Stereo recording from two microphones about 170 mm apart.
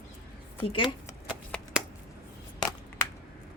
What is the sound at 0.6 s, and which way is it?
Speech, 35° left (ahead or behind).